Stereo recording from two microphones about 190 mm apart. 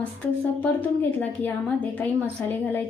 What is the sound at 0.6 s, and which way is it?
A woman's voice, 10° left (ahead or behind).